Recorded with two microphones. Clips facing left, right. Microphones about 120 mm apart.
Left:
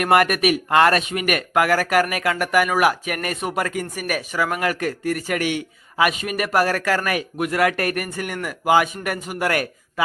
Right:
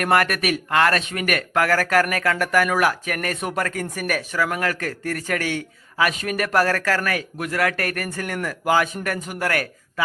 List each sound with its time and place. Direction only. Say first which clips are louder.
0.0 s speech: left 3 dB; 20° left (ahead or behind)